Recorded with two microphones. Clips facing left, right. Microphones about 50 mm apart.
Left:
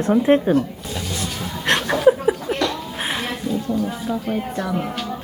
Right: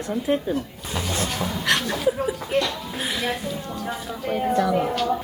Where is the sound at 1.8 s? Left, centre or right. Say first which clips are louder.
Left 7 dB; left.